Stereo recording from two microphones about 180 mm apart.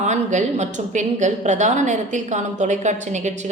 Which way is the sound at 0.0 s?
40° right (ahead or behind).